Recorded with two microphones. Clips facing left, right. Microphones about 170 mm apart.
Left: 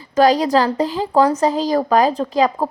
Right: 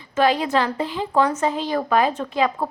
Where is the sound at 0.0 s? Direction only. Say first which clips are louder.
Left 5 dB; 40° left (ahead or behind).